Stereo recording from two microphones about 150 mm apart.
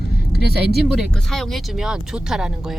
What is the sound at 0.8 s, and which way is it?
Speech, centre (ahead or behind).